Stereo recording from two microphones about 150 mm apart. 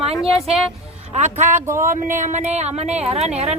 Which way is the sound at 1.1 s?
50° right (ahead or behind).